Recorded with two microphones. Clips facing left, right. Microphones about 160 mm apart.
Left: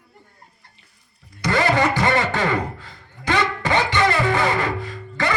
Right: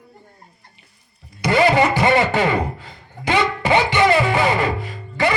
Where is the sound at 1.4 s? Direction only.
15° right (ahead or behind).